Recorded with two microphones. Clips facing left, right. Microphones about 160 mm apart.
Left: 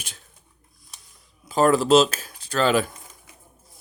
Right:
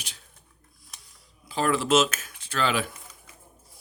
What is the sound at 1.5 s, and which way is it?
Speech, 45° left (ahead or behind).